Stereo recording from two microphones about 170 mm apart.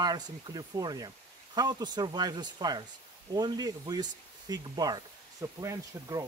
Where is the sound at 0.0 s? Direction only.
25° right (ahead or behind).